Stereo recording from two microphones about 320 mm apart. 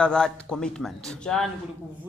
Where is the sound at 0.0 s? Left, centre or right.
Centre.